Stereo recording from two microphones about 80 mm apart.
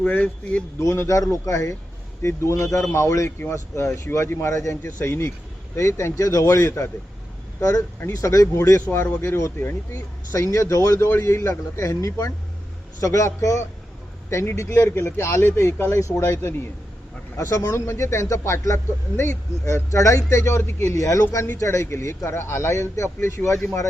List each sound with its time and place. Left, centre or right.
0.0 s speech: left
0.8 s speech: left